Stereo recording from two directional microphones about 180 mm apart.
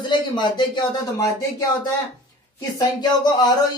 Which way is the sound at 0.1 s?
25° left (ahead or behind).